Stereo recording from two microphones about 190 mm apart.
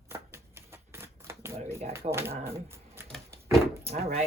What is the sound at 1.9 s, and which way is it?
Speech, 15° right (ahead or behind).